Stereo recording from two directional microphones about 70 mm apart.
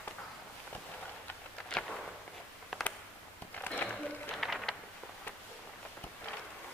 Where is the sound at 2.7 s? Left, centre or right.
Centre.